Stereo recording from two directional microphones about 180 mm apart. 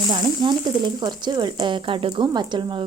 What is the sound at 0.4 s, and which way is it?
Speech, 25° right (ahead or behind).